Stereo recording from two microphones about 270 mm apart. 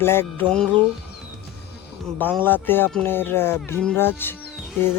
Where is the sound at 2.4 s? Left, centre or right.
Centre.